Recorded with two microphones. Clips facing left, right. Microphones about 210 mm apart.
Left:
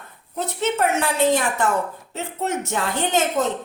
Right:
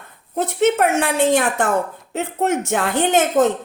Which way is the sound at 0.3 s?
50° right (ahead or behind).